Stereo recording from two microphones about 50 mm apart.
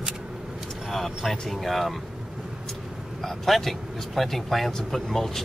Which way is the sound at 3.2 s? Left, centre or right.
Centre.